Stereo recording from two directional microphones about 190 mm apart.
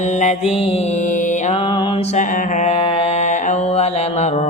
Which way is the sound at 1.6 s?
25° left (ahead or behind).